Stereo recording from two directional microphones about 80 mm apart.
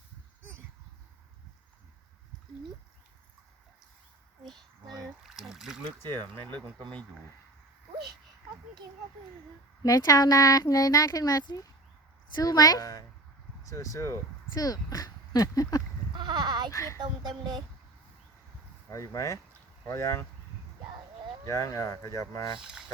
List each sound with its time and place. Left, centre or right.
5.2 s trickle: centre
6.0 s speech: left
9.8 s speech: left
14.5 s speech: left
16.1 s a sound: right
16.7 s speech: left
17.0 s speech: right
18.9 s speech: left
21.4 s speech: left
22.5 s speech: centre